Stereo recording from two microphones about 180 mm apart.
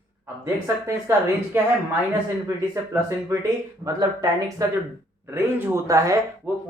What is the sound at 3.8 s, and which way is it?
Speech, 20° right (ahead or behind).